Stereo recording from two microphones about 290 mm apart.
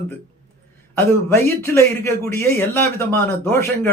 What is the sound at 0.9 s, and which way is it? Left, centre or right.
Speech, centre.